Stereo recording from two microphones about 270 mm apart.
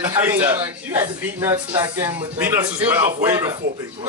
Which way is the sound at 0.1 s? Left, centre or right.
Centre.